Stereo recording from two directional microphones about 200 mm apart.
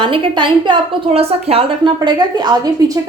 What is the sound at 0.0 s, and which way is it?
A woman's voice, 25° right (ahead or behind).